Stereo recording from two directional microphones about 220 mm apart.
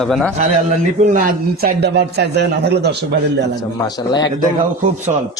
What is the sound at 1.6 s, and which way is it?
A man's voice, 50° right (ahead or behind).